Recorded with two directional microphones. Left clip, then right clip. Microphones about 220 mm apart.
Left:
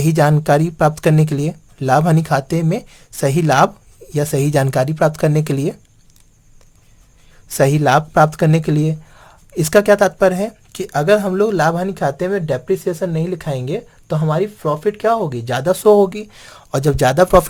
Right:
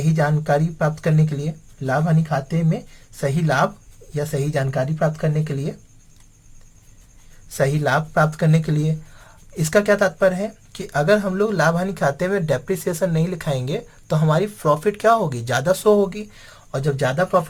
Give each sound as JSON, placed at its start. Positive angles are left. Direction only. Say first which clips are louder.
{"t": 0.2, "sound": "speech", "louder": "left 6 dB", "side_deg": 45}
{"t": 7.5, "sound": "speech", "louder": "left 6 dB", "side_deg": 40}